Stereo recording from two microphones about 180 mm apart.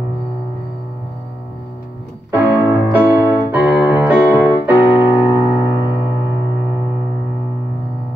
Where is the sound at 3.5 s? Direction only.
10° right (ahead or behind).